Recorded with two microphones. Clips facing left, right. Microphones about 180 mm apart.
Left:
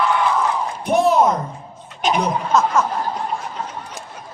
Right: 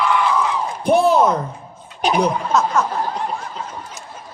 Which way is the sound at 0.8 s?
30° right (ahead or behind).